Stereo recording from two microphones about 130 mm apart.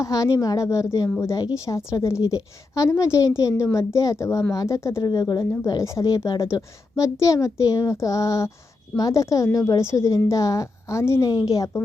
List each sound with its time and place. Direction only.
0.0 s a woman's voice: 25° left (ahead or behind)